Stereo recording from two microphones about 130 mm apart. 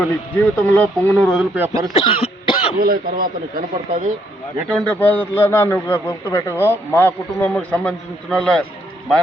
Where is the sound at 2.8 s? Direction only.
90° right.